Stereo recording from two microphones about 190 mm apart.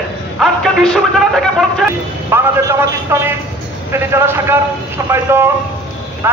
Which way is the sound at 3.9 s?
10° right (ahead or behind).